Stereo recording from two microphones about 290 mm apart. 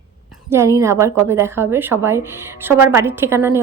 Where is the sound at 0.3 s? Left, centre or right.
Centre.